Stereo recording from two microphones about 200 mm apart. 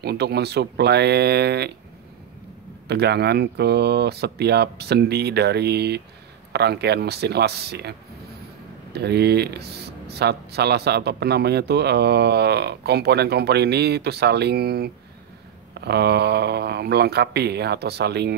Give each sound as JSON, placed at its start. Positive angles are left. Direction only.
{"t": 0.0, "sound": "speech", "side_deg": -55}
{"t": 2.9, "sound": "speech", "side_deg": -55}
{"t": 8.9, "sound": "speech", "side_deg": -55}